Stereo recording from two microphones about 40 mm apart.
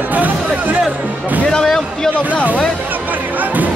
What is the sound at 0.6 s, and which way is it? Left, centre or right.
Speech, right.